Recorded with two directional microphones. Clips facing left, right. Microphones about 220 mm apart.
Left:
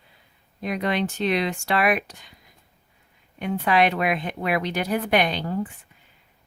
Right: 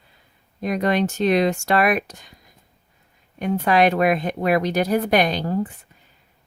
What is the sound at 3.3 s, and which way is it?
Speech, 40° right (ahead or behind).